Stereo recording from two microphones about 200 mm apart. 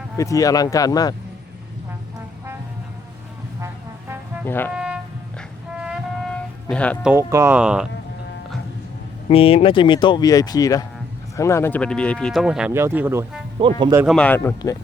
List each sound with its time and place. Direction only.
0.2 s speech: 15° left (ahead or behind)
4.4 s speech: 10° left (ahead or behind)
4.7 s music: 5° right (ahead or behind)
7.0 s speech: 10° right (ahead or behind)
9.3 s speech: 30° left (ahead or behind); by 13.2 s 10° right (ahead or behind)
13.6 s speech: 25° right (ahead or behind)
13.9 s speech: 10° right (ahead or behind)
14.2 s speech: 10° left (ahead or behind)